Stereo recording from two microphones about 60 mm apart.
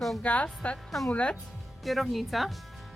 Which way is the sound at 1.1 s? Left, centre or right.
Left.